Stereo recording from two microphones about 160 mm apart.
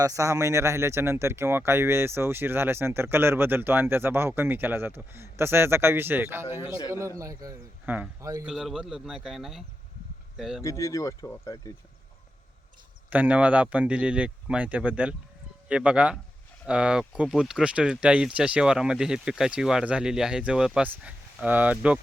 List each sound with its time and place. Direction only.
0.0 s speech: 20° right (ahead or behind)
7.9 s speech: 10° right (ahead or behind)
10.6 s speech: 20° left (ahead or behind)
13.1 s speech: 10° right (ahead or behind)